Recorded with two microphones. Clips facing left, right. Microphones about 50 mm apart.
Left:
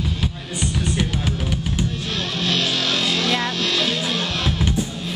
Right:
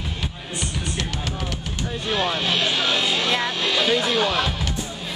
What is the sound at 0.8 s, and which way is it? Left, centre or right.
Music, centre.